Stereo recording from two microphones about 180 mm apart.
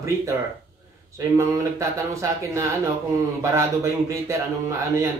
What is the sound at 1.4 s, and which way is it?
Speech, 15° right (ahead or behind).